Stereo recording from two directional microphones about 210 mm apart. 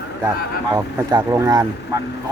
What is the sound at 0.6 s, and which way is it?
Speech, 20° right (ahead or behind).